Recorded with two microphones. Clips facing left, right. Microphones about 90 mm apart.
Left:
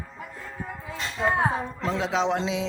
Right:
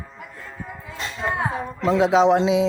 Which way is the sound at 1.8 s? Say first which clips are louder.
Right 10 dB; 15° right (ahead or behind).